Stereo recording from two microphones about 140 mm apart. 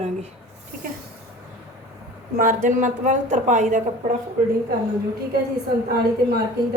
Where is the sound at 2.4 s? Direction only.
70° right (ahead or behind).